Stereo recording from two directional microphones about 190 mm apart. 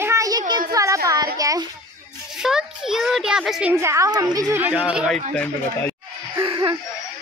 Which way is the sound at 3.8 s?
15° right (ahead or behind).